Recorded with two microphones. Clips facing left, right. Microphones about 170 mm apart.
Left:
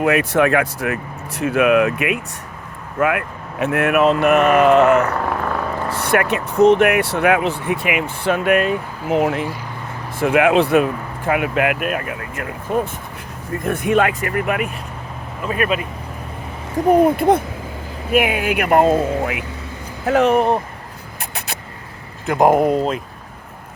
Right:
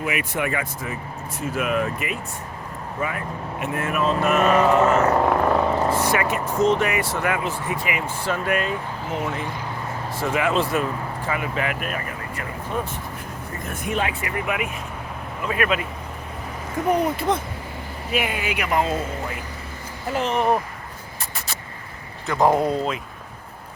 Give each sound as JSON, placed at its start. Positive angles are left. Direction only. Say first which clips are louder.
{"t": 0.0, "sound": "speech", "louder": "left 10 dB", "side_deg": 85}
{"t": 5.1, "sound": "a sound", "louder": "right 3 dB", "side_deg": -25}
{"t": 6.0, "sound": "speech", "louder": "left 4 dB", "side_deg": 65}
{"t": 14.2, "sound": "speech", "louder": "left 5 dB", "side_deg": 50}
{"t": 15.4, "sound": "speech", "louder": "left 3 dB", "side_deg": 30}
{"t": 16.9, "sound": "speech", "louder": "left 9 dB", "side_deg": 50}
{"t": 20.1, "sound": "speech", "louder": "left 10 dB", "side_deg": 70}
{"t": 21.2, "sound": "a sound", "louder": "left 5 dB", "side_deg": 60}
{"t": 22.4, "sound": "speech", "louder": "left 5 dB", "side_deg": 15}